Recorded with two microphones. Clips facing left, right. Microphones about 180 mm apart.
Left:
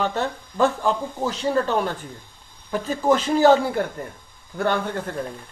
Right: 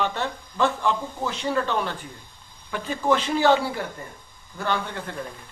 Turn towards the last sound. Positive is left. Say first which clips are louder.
# left 5 dB
turn(degrees=45)  # may be behind; listen again after turning